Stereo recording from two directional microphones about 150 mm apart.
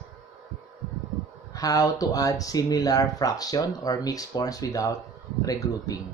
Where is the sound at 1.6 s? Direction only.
25° left (ahead or behind).